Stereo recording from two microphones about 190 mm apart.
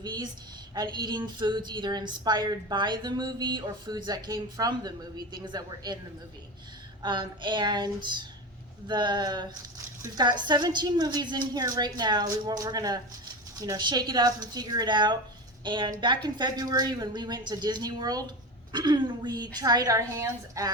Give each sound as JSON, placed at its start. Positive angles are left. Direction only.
{"t": 0.0, "sound": "speech", "side_deg": -20}
{"t": 7.0, "sound": "speech", "side_deg": -25}